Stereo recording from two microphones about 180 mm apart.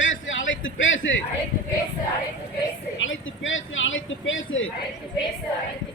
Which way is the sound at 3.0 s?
90° left.